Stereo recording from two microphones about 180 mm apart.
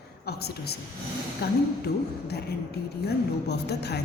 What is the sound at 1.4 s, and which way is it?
Speech, 65° left (ahead or behind).